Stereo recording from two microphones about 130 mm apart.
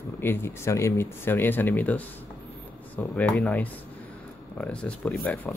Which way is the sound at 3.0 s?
Centre (ahead or behind).